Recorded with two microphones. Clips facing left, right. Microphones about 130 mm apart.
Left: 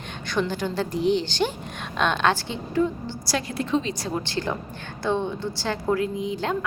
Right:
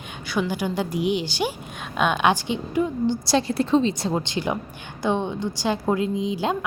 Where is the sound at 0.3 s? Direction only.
10° right (ahead or behind).